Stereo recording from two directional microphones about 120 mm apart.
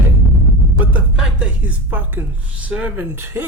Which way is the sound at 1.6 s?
15° right (ahead or behind).